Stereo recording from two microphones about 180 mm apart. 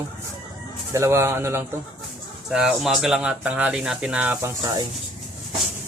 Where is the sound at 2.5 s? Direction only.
Centre (ahead or behind).